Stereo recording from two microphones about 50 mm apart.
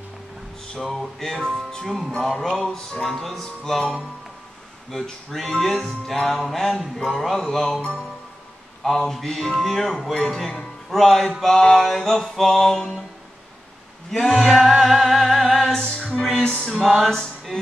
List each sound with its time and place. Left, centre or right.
0.7 s speech: centre
4.9 s speech: centre
8.8 s speech: centre
14.1 s speech: centre
15.5 s music: centre